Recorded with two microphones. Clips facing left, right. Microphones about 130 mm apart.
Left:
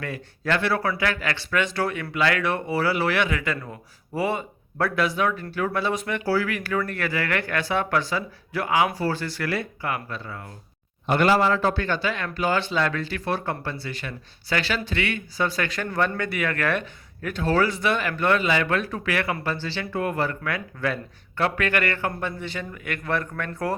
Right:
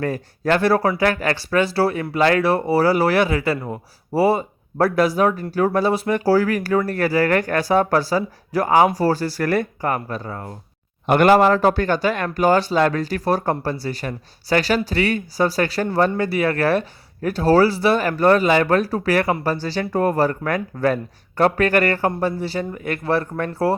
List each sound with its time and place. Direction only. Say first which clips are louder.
0.0 s speech: right 8 dB; 40° right (ahead or behind)
11.0 s speech: right 6 dB; 55° right (ahead or behind); by 23.5 s 35° right (ahead or behind)